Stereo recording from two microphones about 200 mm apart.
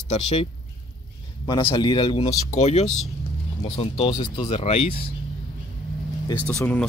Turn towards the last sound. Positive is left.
turn(degrees=10)  # may be behind; listen again after turning